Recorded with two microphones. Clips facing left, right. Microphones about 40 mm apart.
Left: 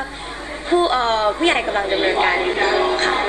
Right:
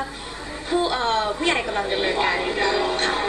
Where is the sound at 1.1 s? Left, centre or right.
Left.